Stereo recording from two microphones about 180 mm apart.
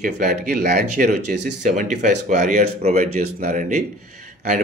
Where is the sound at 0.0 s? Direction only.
45° right (ahead or behind).